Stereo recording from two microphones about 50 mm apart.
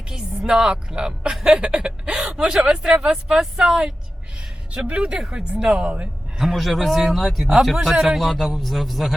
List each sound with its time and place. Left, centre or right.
0.1 s a woman's voice: centre
4.9 s a woman's voice: centre
6.4 s a man's voice: centre